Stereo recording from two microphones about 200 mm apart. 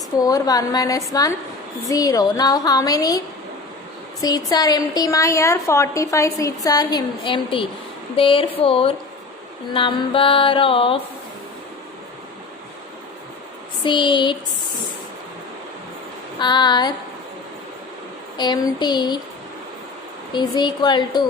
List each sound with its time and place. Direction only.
0.2 s a woman's voice: 20° left (ahead or behind)
4.2 s a woman's voice: 20° left (ahead or behind)
8.1 s mantra: 25° left (ahead or behind)
13.8 s mantra: 25° left (ahead or behind)
16.4 s mantra: 20° left (ahead or behind)
18.3 s mantra: 20° left (ahead or behind)
20.3 s mantra: 20° left (ahead or behind)